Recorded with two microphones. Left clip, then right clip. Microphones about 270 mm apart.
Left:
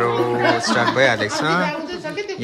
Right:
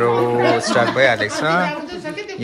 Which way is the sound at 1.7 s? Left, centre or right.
Left.